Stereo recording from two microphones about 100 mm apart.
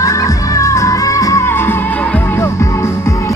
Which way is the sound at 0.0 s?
35° left (ahead or behind).